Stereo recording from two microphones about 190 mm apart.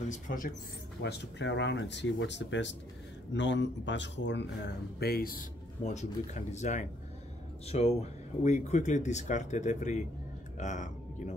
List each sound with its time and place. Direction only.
0.1 s speech: 45° left (ahead or behind)
1.0 s speech: 65° left (ahead or behind); by 11.3 s 40° left (ahead or behind)